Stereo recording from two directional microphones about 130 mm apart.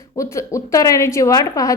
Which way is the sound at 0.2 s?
25° left (ahead or behind).